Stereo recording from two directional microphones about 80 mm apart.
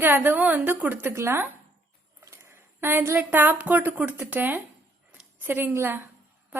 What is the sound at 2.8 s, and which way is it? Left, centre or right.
A woman's voice, right.